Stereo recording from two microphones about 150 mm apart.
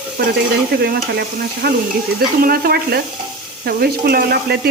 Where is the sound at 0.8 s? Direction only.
90° right.